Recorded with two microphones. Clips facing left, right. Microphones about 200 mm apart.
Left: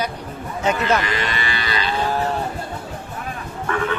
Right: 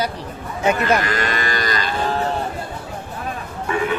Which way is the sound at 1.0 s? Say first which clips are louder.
Right 2 dB; 45° right (ahead or behind).